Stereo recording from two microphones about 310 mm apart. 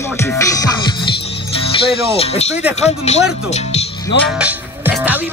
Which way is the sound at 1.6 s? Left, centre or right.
Centre.